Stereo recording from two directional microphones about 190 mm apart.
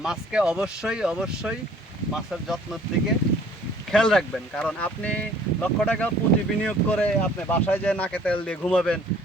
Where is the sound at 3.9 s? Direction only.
5° left (ahead or behind).